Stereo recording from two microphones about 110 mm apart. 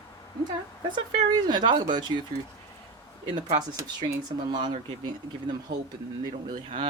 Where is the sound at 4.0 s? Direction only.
40° right (ahead or behind).